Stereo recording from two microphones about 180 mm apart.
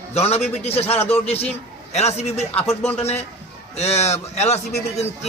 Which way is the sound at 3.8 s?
35° left (ahead or behind).